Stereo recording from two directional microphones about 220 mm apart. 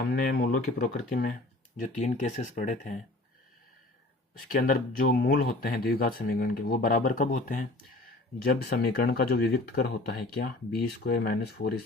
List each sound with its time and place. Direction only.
0.0 s speech: 45° left (ahead or behind)
4.4 s speech: 40° left (ahead or behind)
8.7 s speech: 45° left (ahead or behind)